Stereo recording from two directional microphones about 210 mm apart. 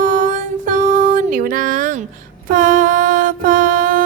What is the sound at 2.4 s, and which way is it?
Mantra, 40° right (ahead or behind).